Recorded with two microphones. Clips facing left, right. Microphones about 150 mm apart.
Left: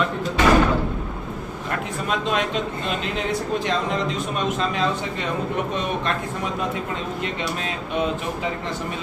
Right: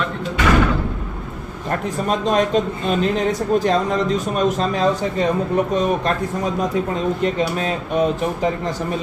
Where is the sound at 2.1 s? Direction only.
40° right (ahead or behind).